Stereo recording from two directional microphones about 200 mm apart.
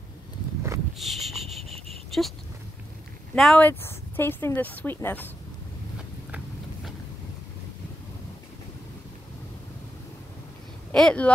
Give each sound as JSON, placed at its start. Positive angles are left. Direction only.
{"t": 0.9, "sound": "a sound", "side_deg": 0}
{"t": 2.1, "sound": "speech", "side_deg": 0}
{"t": 3.3, "sound": "speech", "side_deg": 5}
{"t": 10.9, "sound": "speech", "side_deg": 5}